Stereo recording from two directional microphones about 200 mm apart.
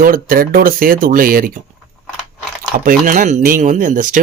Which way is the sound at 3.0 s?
40° right (ahead or behind).